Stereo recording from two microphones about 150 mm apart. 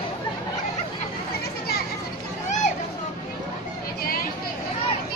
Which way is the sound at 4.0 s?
80° left.